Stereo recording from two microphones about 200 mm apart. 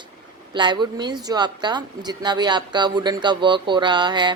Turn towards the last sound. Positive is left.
turn(degrees=-20)  # may be behind; listen again after turning